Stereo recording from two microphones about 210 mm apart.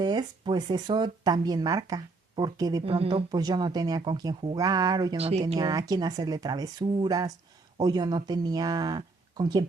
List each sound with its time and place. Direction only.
0.0 s speech: 20° right (ahead or behind)
5.5 s speech: 15° right (ahead or behind)